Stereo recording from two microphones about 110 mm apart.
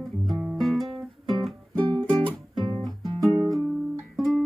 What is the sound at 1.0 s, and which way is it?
Music, centre (ahead or behind).